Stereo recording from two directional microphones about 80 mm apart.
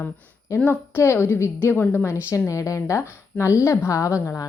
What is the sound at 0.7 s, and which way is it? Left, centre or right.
A woman's voice, left.